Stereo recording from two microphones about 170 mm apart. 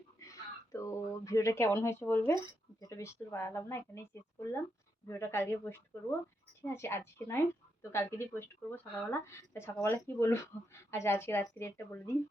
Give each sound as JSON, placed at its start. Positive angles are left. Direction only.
{"t": 0.2, "sound": "a woman's voice", "side_deg": 20}